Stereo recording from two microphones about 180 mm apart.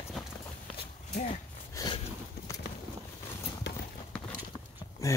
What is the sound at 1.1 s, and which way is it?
Horse, 50° left (ahead or behind).